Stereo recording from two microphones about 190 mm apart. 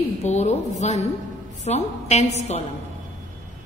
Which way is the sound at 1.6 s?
35° left (ahead or behind).